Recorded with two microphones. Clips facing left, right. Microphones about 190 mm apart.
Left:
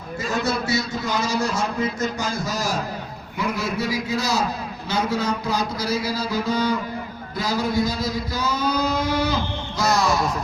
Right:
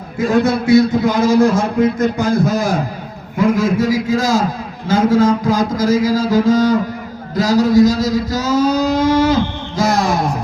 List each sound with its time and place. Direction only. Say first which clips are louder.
0.2 s a man's voice: right 10 dB; 55° right (ahead or behind)
3.9 s a man's voice: right 9 dB; 90° right
4.2 s speech: right 7 dB; 45° right (ahead or behind)
8.6 s guitar: right 7 dB; 45° right (ahead or behind)
9.9 s speech: right 2 dB; 55° right (ahead or behind)